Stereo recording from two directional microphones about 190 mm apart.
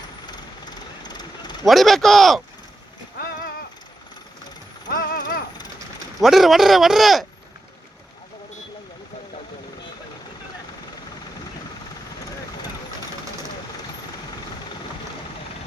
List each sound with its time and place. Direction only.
0.3 s vehicle: 20° left (ahead or behind)
1.6 s speech: centre (ahead or behind)
3.2 s clip-clop: 50° left (ahead or behind)
4.9 s mechanisms: 50° left (ahead or behind)
6.2 s speech: centre (ahead or behind)